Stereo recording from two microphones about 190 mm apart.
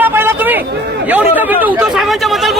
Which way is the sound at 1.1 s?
10° right (ahead or behind).